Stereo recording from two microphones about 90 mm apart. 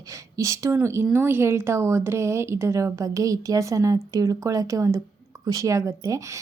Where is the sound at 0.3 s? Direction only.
40° right (ahead or behind).